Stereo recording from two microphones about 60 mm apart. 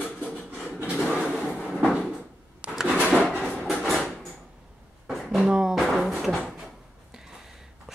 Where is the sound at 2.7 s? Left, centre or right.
Centre.